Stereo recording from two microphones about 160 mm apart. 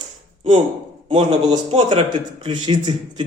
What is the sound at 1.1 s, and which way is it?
A man's voice, 35° right (ahead or behind).